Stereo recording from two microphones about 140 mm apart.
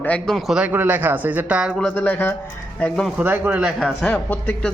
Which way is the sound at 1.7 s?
10° left (ahead or behind).